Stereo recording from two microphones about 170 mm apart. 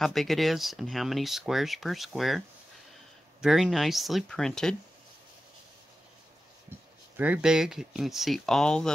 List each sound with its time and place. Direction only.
0.0 s speech: centre (ahead or behind)
7.2 s speech: 5° right (ahead or behind)